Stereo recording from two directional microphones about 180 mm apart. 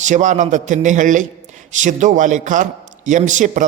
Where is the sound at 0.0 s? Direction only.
45° right (ahead or behind).